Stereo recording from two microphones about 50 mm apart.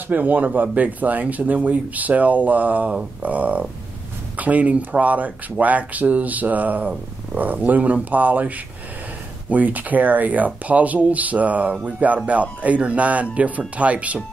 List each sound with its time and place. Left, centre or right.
0.1 s speech: right